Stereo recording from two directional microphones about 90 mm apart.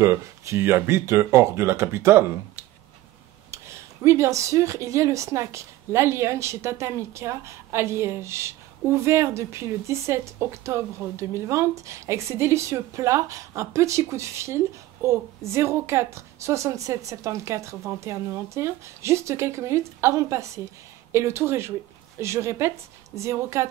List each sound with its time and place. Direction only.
0.0 s speech: 30° right (ahead or behind)
3.5 s speech: 30° right (ahead or behind)